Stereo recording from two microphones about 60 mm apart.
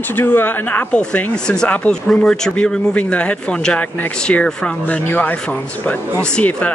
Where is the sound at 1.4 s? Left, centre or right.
Centre.